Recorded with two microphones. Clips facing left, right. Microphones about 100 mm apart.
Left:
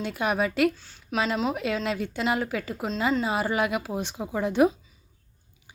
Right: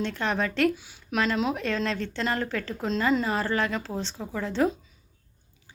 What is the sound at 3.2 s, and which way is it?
Speech, 15° left (ahead or behind).